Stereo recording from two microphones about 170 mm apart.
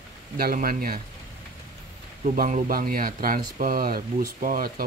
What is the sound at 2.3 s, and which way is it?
Speech, 50° right (ahead or behind).